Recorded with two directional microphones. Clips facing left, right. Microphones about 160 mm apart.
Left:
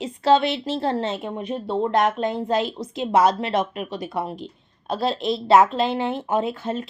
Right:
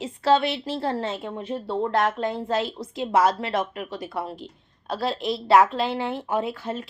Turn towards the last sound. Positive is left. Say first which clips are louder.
# left 3 dB
turn(degrees=25)  # may be behind; listen again after turning